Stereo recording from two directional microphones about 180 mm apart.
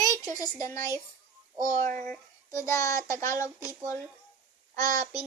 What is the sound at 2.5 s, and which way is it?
Child singing, 20° left (ahead or behind).